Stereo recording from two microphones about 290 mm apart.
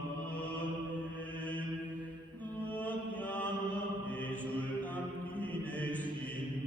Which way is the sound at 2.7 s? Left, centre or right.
Centre.